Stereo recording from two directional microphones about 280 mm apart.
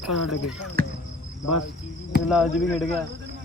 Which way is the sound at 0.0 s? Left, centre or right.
Centre.